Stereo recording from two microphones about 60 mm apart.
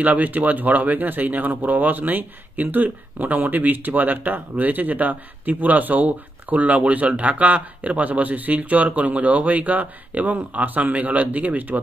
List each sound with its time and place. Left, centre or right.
0.0 s speech: right